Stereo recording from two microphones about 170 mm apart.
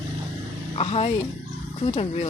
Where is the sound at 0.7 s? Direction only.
35° left (ahead or behind).